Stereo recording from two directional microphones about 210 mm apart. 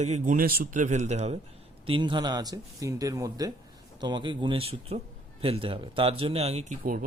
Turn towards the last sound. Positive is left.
turn(degrees=-35)  # may be behind; listen again after turning